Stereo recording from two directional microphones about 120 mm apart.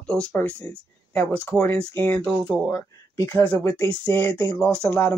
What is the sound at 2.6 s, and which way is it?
Speech, 20° left (ahead or behind).